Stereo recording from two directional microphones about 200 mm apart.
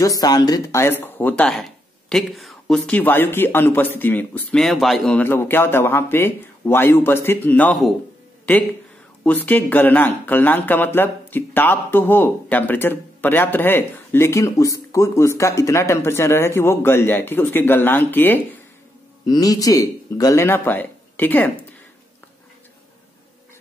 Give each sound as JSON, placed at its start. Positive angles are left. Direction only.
{"t": 0.0, "sound": "speech", "side_deg": 20}
{"t": 9.2, "sound": "speech", "side_deg": 10}